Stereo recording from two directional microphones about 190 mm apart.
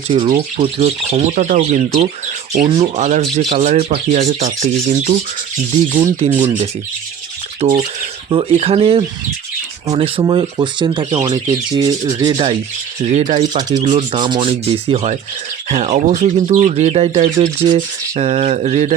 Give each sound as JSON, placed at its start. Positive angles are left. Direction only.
{"t": 0.1, "sound": "speech", "side_deg": -25}
{"t": 6.2, "sound": "speech", "side_deg": -30}
{"t": 7.6, "sound": "speech", "side_deg": -30}
{"t": 13.1, "sound": "speech", "side_deg": -35}
{"t": 13.5, "sound": "speech", "side_deg": -20}
{"t": 17.7, "sound": "speech", "side_deg": -35}